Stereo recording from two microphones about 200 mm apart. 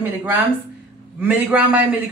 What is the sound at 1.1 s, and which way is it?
Speech, 5° right (ahead or behind).